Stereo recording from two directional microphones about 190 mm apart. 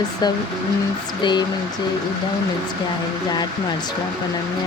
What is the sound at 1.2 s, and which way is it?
Speech, 25° left (ahead or behind).